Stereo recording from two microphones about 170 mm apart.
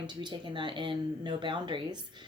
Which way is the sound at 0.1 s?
25° right (ahead or behind).